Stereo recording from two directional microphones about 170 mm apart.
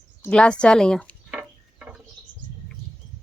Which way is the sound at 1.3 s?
5° right (ahead or behind).